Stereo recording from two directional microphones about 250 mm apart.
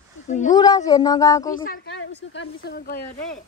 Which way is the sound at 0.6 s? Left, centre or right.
Centre.